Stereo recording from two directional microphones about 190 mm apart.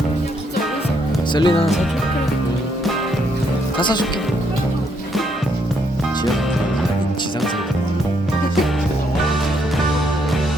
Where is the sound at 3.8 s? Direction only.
25° left (ahead or behind).